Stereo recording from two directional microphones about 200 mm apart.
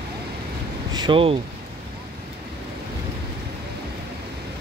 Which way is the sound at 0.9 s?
25° right (ahead or behind).